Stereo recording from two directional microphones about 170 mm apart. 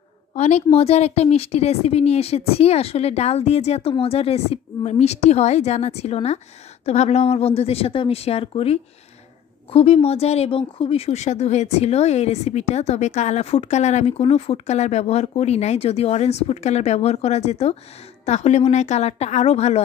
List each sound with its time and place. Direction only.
0.3 s speech: 40° left (ahead or behind)